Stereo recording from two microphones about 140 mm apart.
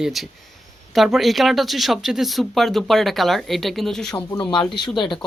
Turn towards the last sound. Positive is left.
turn(degrees=35)  # may be behind; listen again after turning